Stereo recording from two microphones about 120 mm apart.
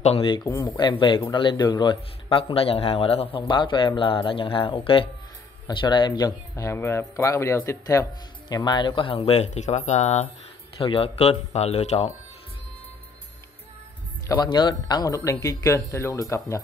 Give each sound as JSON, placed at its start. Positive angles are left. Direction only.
{"t": 0.2, "sound": "speech", "side_deg": 40}
{"t": 10.8, "sound": "speech", "side_deg": 50}
{"t": 14.4, "sound": "speech", "side_deg": 35}